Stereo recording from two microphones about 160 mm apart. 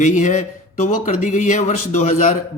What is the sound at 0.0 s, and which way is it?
A man's voice, 50° left (ahead or behind).